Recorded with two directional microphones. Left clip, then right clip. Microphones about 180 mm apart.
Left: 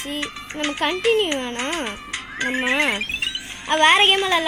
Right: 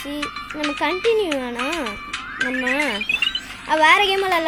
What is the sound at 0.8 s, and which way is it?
Speech, 10° right (ahead or behind).